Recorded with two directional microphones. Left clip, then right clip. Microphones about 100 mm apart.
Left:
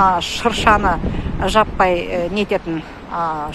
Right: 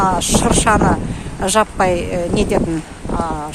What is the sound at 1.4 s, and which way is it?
Speech, 85° right.